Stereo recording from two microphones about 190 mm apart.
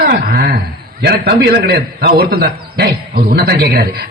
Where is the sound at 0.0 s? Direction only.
55° right (ahead or behind).